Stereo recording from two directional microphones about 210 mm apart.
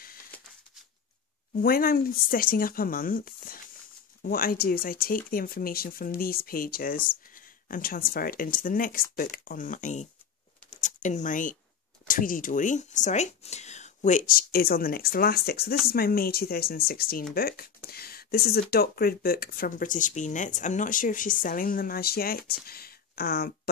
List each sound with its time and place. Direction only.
1.5 s speech: 45° left (ahead or behind)
10.7 s a sound: 35° left (ahead or behind)
12.1 s speech: 40° left (ahead or behind)